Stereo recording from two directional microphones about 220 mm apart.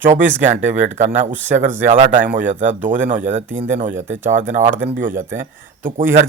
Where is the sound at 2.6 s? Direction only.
10° right (ahead or behind).